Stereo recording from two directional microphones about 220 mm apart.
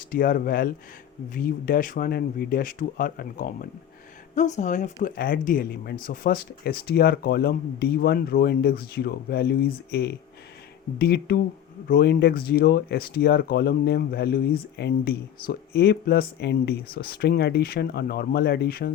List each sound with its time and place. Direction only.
0.0 s speech: 40° left (ahead or behind)